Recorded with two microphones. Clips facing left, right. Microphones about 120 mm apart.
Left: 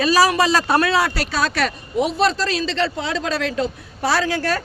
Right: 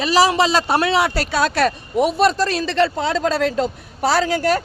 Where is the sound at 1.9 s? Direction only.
50° right (ahead or behind).